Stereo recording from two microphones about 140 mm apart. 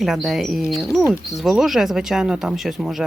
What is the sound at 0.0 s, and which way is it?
Speech, centre (ahead or behind).